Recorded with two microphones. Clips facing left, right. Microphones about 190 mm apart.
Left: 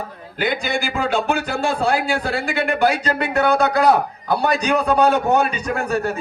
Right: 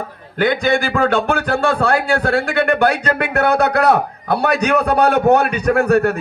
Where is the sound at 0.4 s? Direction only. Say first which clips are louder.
Right 6 dB; 55° right (ahead or behind).